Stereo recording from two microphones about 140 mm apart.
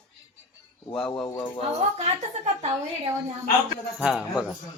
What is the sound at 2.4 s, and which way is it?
Speech, 50° right (ahead or behind).